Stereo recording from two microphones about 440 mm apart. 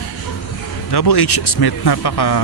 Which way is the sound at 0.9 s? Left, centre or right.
Left.